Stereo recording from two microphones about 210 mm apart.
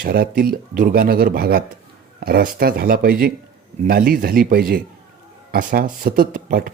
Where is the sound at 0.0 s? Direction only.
45° right (ahead or behind).